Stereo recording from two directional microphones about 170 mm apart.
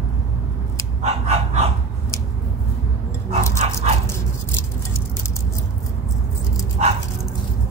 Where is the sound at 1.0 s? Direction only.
40° right (ahead or behind).